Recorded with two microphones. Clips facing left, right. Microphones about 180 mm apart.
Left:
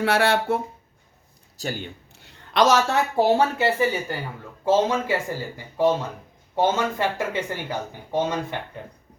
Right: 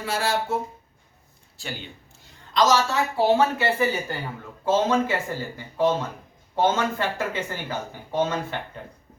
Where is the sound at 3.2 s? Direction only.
45° left (ahead or behind).